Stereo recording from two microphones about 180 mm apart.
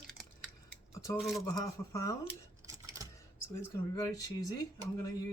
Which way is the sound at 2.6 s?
20° right (ahead or behind).